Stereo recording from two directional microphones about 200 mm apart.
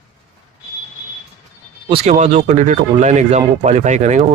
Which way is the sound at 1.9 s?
35° right (ahead or behind).